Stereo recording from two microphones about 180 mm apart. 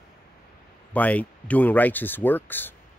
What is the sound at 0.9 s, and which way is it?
Speech, 10° left (ahead or behind).